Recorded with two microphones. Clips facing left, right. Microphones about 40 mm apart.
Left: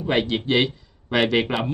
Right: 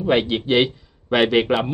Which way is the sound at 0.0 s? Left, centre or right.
Centre.